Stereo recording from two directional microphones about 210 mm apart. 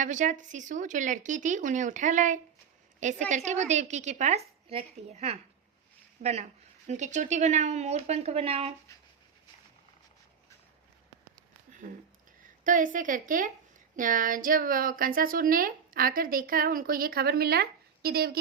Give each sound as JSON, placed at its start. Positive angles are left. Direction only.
{"t": 0.0, "sound": "a woman's voice", "side_deg": -35}
{"t": 11.8, "sound": "a woman's voice", "side_deg": -40}